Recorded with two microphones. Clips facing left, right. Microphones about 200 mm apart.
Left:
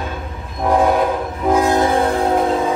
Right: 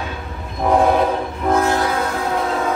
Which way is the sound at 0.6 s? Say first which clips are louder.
Even; centre (ahead or behind).